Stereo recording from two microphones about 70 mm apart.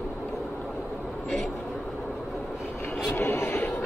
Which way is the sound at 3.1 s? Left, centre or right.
Left.